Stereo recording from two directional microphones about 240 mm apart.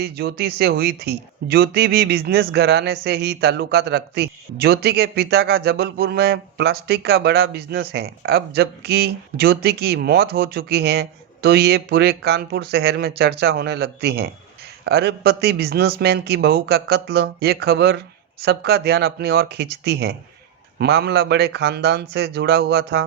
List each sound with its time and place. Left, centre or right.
0.0 s speech: right